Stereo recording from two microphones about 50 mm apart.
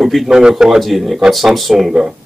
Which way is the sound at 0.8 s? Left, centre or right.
Centre.